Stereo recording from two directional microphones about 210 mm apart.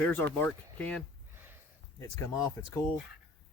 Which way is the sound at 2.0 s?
15° left (ahead or behind).